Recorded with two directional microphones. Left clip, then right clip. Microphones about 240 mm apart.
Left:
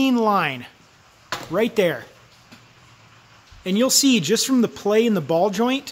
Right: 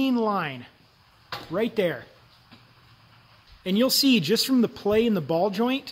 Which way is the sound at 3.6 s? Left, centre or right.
Centre.